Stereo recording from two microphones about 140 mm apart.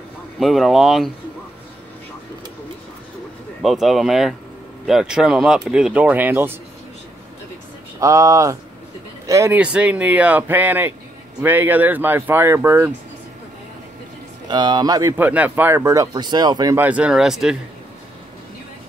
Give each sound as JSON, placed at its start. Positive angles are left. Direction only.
{"t": 0.4, "sound": "speech", "side_deg": 0}
{"t": 3.6, "sound": "speech", "side_deg": 0}
{"t": 8.0, "sound": "speech", "side_deg": -20}
{"t": 9.6, "sound": "speech", "side_deg": -10}
{"t": 14.5, "sound": "speech", "side_deg": -30}
{"t": 15.1, "sound": "speech", "side_deg": -10}
{"t": 16.7, "sound": "speech", "side_deg": -10}